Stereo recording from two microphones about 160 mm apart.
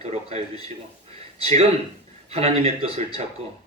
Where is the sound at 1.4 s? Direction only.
35° right (ahead or behind).